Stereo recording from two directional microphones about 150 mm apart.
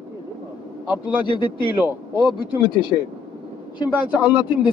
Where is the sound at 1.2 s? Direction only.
30° left (ahead or behind).